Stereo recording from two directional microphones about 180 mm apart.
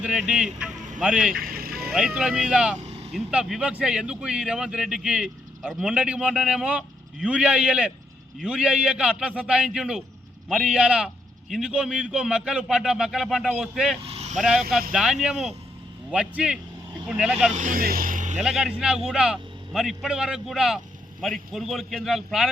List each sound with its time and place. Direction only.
0.0 s speech: 5° right (ahead or behind)
1.3 s vehicle: 55° right (ahead or behind)
2.0 s speech: 5° right (ahead or behind)
2.7 s vehicle: 40° right (ahead or behind)
3.1 s speech: 5° right (ahead or behind)
14.0 s vehicle: 35° right (ahead or behind)
14.9 s speech: 5° right (ahead or behind)
17.5 s speech: 50° right (ahead or behind)
18.4 s speech: 5° right (ahead or behind)